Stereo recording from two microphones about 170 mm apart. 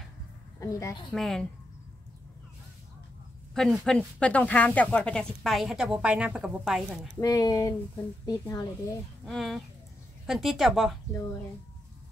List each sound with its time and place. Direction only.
0.6 s a woman's voice: 20° left (ahead or behind)
1.1 s speech: centre (ahead or behind)
3.5 s speech: 5° left (ahead or behind)
7.2 s speech: 20° left (ahead or behind)
9.2 s speech: centre (ahead or behind)